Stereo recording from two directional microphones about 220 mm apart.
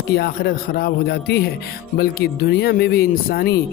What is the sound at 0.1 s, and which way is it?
Speech, 45° left (ahead or behind).